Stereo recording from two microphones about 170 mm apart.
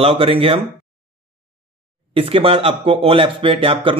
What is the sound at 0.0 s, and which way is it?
Speech, 35° right (ahead or behind).